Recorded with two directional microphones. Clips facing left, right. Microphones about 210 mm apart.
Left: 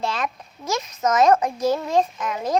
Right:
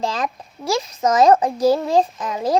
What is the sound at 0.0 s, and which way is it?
A child's voice, 35° right (ahead or behind).